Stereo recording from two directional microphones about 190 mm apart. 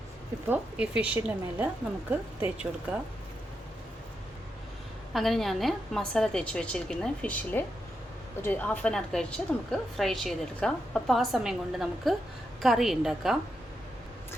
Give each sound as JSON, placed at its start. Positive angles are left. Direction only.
{"t": 0.4, "sound": "a woman's voice", "side_deg": -10}
{"t": 5.1, "sound": "a woman's voice", "side_deg": 0}